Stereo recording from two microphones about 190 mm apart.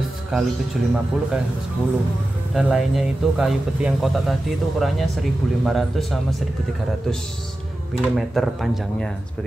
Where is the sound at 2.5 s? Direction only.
Centre (ahead or behind).